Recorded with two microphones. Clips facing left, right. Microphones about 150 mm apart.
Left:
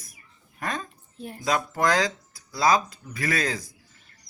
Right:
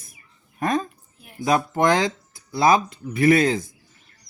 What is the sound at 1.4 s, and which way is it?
Speech, 25° right (ahead or behind).